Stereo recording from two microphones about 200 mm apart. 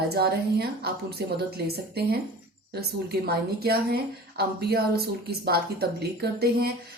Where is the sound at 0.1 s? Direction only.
50° right (ahead or behind).